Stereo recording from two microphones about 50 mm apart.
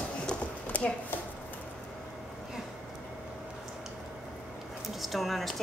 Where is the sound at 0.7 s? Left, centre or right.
Left.